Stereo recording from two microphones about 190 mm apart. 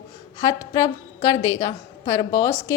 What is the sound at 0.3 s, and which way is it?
A woman's voice, 20° left (ahead or behind).